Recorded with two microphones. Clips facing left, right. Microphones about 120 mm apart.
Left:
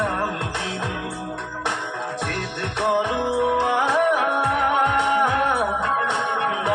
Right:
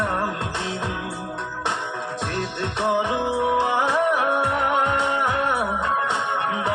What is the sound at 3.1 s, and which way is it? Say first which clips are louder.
Music: left 1 dB; 20° right (ahead or behind).